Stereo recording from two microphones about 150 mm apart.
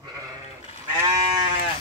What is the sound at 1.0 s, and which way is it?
Sheep, 25° right (ahead or behind).